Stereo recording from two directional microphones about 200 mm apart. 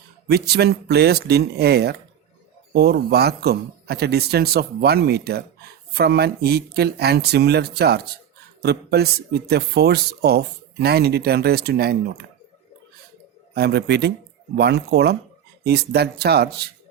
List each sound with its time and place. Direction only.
0.3 s speech: 55° right (ahead or behind)
13.5 s a man's voice: 55° right (ahead or behind)